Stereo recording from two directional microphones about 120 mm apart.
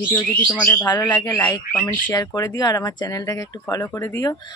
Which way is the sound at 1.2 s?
30° left (ahead or behind).